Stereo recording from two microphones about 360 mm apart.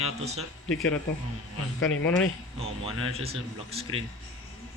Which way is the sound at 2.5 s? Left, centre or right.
Centre.